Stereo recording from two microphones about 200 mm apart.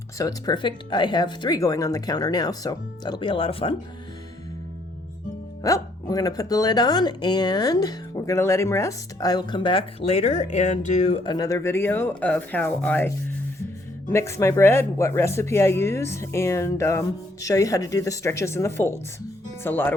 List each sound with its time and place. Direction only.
0.2 s speech: 20° left (ahead or behind)
5.6 s speech: 15° left (ahead or behind)